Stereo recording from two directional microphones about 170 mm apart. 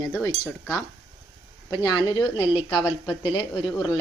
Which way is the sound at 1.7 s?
25° left (ahead or behind).